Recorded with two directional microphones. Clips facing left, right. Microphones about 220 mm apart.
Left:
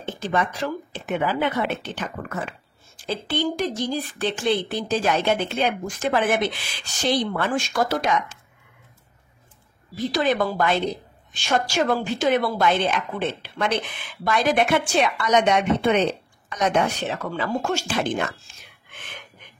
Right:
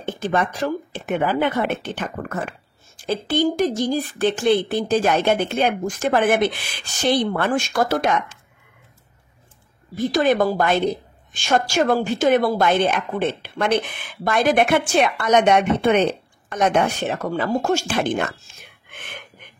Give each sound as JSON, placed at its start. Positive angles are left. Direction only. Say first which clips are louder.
{"t": 0.0, "sound": "a woman's voice", "louder": "right 3 dB", "side_deg": -55}
{"t": 9.9, "sound": "a woman's voice", "louder": "right 4 dB", "side_deg": -50}